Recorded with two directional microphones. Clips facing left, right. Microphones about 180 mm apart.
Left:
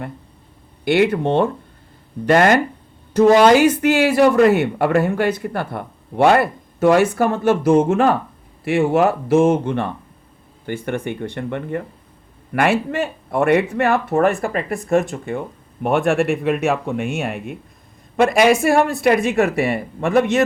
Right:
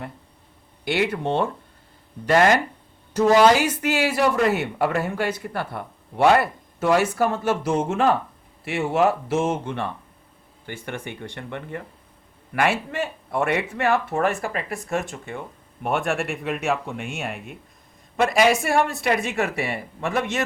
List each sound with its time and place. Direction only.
0.9 s speech: 55° left (ahead or behind)